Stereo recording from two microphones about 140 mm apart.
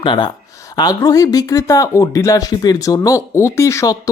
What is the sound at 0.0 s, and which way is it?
Speech, 35° left (ahead or behind).